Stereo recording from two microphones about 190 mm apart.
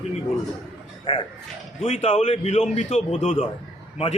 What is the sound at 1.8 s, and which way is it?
A man's voice, 35° left (ahead or behind).